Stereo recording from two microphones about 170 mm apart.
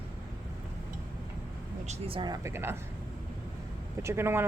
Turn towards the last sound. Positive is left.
turn(degrees=-15)  # may be behind; listen again after turning